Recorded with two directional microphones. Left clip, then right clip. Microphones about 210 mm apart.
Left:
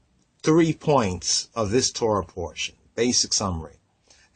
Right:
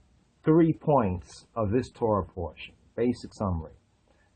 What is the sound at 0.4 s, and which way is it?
Speech, 35° left (ahead or behind).